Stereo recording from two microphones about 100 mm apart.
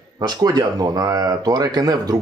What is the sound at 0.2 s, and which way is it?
Speech, 40° right (ahead or behind).